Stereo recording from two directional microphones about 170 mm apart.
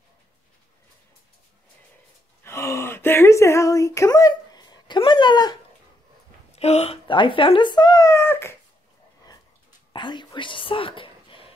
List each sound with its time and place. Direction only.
2.4 s a sound: 15° left (ahead or behind)
6.5 s speech: 40° left (ahead or behind); by 8.5 s 15° left (ahead or behind)
9.2 s whispering: 25° left (ahead or behind)